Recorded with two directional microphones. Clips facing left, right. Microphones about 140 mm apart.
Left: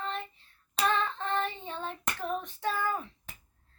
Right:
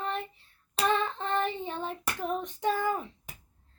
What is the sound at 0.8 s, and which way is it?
Child singing, 15° right (ahead or behind).